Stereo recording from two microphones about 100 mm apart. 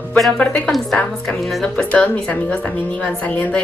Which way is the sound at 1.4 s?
Centre (ahead or behind).